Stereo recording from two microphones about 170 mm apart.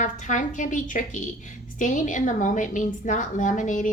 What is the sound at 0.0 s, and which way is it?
A woman's voice, 45° left (ahead or behind).